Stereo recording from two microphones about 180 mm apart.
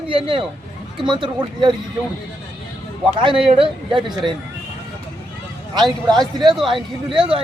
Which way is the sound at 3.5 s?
30° right (ahead or behind).